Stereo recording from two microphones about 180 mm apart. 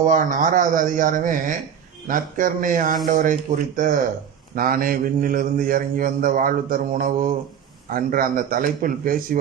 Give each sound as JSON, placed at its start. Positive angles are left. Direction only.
{"t": 0.0, "sound": "a man's voice", "side_deg": -45}